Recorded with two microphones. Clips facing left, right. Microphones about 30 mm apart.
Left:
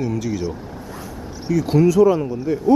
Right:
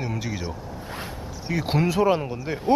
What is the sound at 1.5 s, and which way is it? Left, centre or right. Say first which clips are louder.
Speech: left 8 dB; right.